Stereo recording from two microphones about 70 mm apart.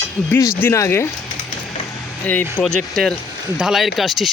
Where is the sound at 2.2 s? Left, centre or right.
Left.